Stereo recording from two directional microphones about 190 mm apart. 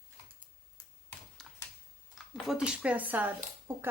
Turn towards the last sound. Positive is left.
turn(degrees=-10)  # may be behind; listen again after turning